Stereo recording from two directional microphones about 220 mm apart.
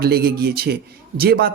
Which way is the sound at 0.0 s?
45° right (ahead or behind).